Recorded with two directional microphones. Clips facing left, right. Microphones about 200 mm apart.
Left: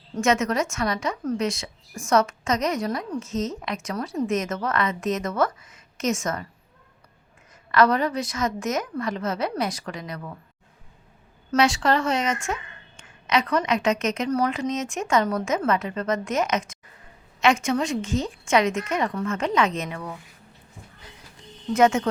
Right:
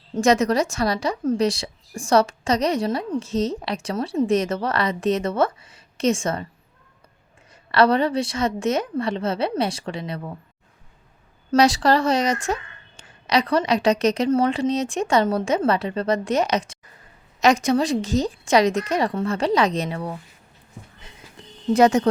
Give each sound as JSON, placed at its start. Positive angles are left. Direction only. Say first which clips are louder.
{"t": 0.2, "sound": "a woman's voice", "louder": "right 4 dB", "side_deg": -35}
{"t": 7.7, "sound": "a woman's voice", "louder": "right 2 dB", "side_deg": -30}
{"t": 11.5, "sound": "a woman's voice", "louder": "right 4 dB", "side_deg": -35}
{"t": 21.7, "sound": "a woman's voice", "louder": "right 3 dB", "side_deg": -35}